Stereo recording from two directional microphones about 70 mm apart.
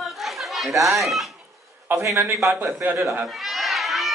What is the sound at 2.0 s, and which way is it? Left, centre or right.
Speech, right.